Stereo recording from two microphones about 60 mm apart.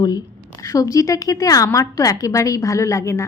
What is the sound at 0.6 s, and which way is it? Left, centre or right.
A woman's voice, left.